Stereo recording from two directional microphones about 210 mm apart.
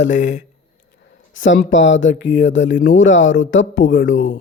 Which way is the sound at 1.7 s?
60° left (ahead or behind).